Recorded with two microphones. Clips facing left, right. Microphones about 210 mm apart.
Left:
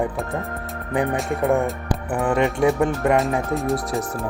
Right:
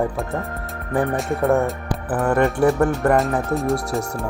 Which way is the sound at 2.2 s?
15° left (ahead or behind).